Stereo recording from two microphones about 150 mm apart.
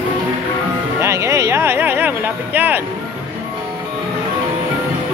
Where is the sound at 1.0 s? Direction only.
20° right (ahead or behind).